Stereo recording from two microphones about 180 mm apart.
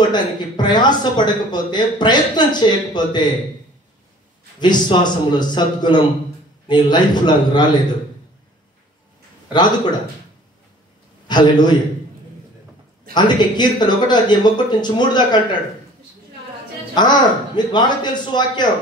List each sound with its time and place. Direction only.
0.1 s a man's voice: 25° left (ahead or behind)
4.6 s a man's voice: 25° left (ahead or behind)
9.5 s a man's voice: 25° left (ahead or behind)
11.2 s a man's voice: 25° left (ahead or behind)
13.1 s a man's voice: 25° left (ahead or behind)
16.9 s a man's voice: 25° left (ahead or behind)